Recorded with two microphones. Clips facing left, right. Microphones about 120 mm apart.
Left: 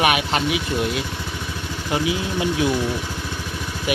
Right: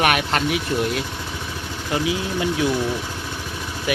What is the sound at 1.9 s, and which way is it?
Speech, 20° left (ahead or behind).